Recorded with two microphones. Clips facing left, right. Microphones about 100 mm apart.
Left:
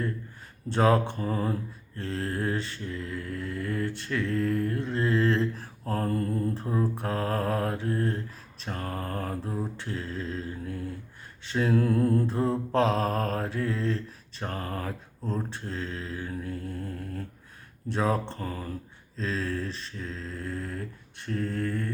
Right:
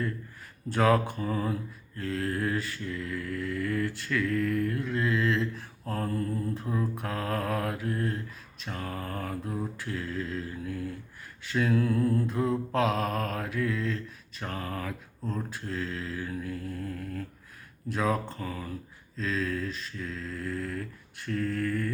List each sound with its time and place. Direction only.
0.7 s mantra: 30° left (ahead or behind); by 6.5 s 50° left (ahead or behind)
6.5 s mantra: 35° left (ahead or behind)